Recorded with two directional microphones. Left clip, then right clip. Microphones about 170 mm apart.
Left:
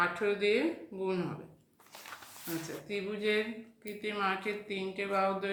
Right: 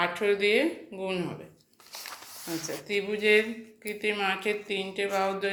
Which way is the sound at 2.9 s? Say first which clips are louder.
Right 9 dB; 15° right (ahead or behind).